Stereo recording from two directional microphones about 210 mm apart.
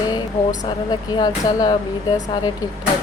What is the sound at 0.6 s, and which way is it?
Speech, 20° left (ahead or behind).